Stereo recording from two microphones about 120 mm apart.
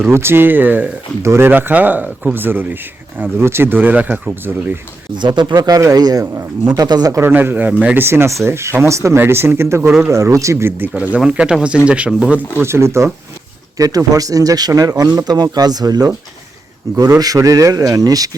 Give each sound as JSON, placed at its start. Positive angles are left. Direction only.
{"t": 0.0, "sound": "speech", "side_deg": -20}
{"t": 5.1, "sound": "speech", "side_deg": -40}
{"t": 7.2, "sound": "speech", "side_deg": -15}
{"t": 12.5, "sound": "speech", "side_deg": -20}